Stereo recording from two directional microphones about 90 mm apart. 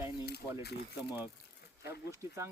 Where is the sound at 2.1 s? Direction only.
35° right (ahead or behind).